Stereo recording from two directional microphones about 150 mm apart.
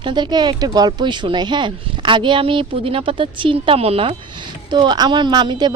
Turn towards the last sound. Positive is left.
turn(degrees=-30)  # may be behind; listen again after turning